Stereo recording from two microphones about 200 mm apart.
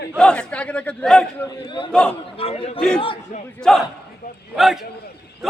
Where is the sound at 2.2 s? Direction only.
30° left (ahead or behind).